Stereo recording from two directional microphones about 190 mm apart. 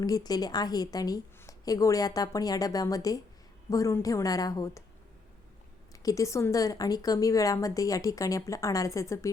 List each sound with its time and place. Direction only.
0.0 s a woman's voice: 20° left (ahead or behind)
5.9 s a woman's voice: 20° left (ahead or behind)